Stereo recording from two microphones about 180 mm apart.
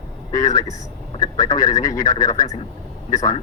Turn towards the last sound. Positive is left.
turn(degrees=20)  # may be behind; listen again after turning